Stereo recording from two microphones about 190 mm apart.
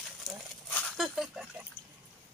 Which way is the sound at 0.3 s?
Centre (ahead or behind).